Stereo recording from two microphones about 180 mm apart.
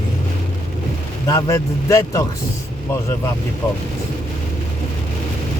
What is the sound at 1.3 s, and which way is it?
Speech, 15° left (ahead or behind).